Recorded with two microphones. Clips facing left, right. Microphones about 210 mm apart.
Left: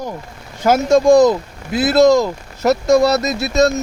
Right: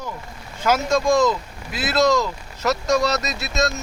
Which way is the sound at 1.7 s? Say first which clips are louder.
Left 8 dB; 50° left (ahead or behind).